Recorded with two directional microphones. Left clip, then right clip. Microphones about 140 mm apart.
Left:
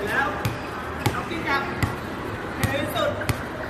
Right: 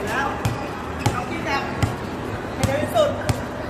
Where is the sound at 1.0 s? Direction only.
10° right (ahead or behind).